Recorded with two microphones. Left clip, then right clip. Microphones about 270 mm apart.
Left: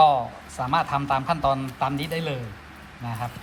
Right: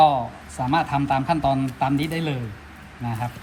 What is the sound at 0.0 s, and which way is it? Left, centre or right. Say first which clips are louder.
A man's voice: right 1 dB; centre.